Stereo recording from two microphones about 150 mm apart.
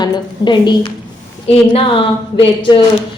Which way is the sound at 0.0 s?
30° left (ahead or behind).